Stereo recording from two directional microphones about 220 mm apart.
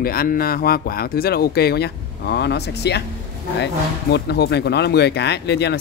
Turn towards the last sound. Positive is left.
turn(degrees=50)  # may be behind; listen again after turning